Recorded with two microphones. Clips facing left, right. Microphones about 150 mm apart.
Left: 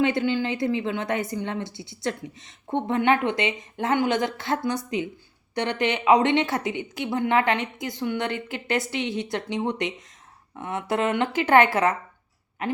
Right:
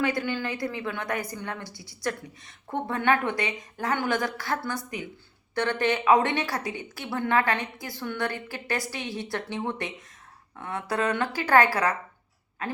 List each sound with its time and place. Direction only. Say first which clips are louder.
0.0 s a woman's voice: left 5 dB; 20° left (ahead or behind)